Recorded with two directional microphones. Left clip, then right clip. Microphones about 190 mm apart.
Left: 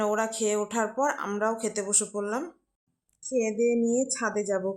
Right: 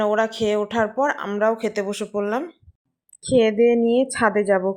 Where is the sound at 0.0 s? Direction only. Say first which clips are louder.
Right 7 dB; 10° right (ahead or behind).